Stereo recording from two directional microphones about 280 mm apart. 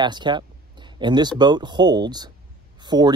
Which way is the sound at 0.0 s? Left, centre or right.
Centre.